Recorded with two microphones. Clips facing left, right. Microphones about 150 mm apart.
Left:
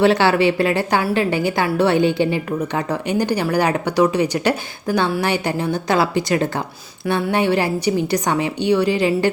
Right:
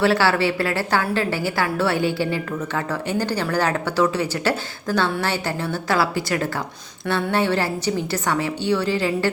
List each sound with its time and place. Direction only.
0.0 s a woman's voice: 20° left (ahead or behind)